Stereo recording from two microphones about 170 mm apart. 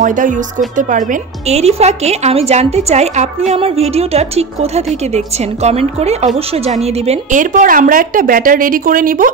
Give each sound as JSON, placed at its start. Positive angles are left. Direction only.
{"t": 0.0, "sound": "a woman's voice", "side_deg": -50}
{"t": 1.5, "sound": "a woman's voice", "side_deg": -40}